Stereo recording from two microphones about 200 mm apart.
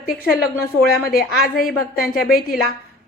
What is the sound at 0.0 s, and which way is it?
Speech, 45° left (ahead or behind).